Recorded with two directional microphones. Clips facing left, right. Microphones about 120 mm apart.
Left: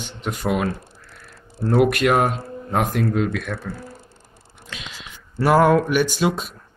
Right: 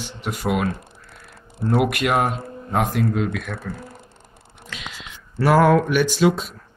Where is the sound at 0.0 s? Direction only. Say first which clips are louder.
Even; 10° right (ahead or behind).